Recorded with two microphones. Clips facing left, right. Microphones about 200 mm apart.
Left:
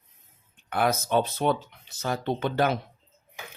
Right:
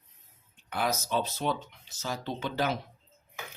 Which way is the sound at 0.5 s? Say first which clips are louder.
Left 5 dB; 55° left (ahead or behind).